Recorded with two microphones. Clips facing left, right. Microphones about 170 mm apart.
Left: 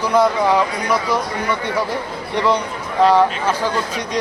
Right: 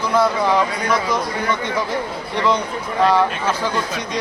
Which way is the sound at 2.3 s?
10° left (ahead or behind).